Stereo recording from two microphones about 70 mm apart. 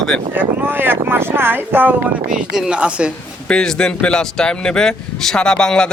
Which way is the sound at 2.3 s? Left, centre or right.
Centre.